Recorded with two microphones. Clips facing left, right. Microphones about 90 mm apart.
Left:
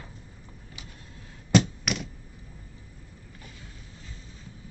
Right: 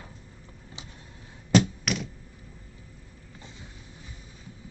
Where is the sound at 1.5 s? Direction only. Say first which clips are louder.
Right 1 dB; centre (ahead or behind).